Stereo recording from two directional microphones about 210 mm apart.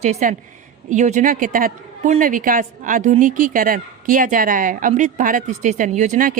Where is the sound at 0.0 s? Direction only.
35° right (ahead or behind).